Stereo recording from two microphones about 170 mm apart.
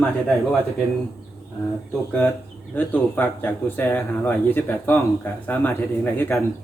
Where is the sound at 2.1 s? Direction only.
15° left (ahead or behind).